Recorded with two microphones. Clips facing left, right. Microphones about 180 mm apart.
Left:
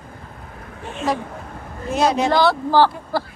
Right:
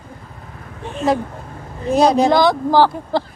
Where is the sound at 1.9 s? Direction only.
35° right (ahead or behind).